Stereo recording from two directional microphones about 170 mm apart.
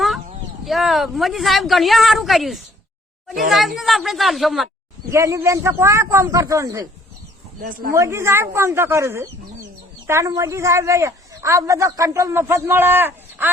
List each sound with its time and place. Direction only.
0.6 s speech: centre (ahead or behind)
5.1 s a man's voice: 15° right (ahead or behind)
7.6 s speech: 55° right (ahead or behind)
7.9 s a man's voice: 15° right (ahead or behind)